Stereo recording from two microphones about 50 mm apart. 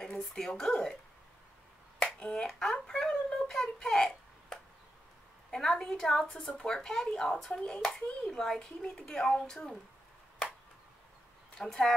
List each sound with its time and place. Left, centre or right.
0.0 s a sound: centre
0.4 s a child's voice: centre
2.0 s finger snapping: left
2.4 s a sound: centre
5.5 s a child's voice: centre
6.3 s a child's voice: centre
11.5 s a woman's voice: centre